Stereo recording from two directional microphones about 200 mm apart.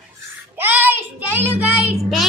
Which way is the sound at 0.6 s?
10° right (ahead or behind).